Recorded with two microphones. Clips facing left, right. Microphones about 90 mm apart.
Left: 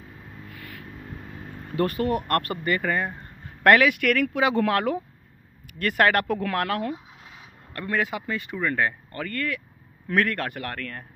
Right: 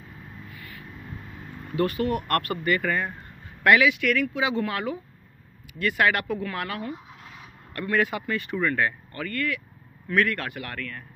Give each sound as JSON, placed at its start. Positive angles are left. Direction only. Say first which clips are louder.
{"t": 0.5, "sound": "a sound", "louder": "left 2 dB", "side_deg": 65}
{"t": 1.8, "sound": "speech", "louder": "left 1 dB", "side_deg": 35}
{"t": 3.6, "sound": "speech", "louder": "left 2 dB", "side_deg": 50}
{"t": 5.8, "sound": "a man's voice", "louder": "left 2 dB", "side_deg": 45}
{"t": 7.7, "sound": "speech", "louder": "right 2 dB", "side_deg": 25}
{"t": 8.6, "sound": "a man's voice", "louder": "left 2 dB", "side_deg": 30}